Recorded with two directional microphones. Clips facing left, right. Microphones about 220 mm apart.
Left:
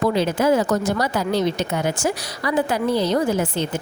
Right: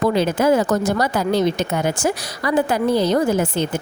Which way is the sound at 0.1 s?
50° right (ahead or behind).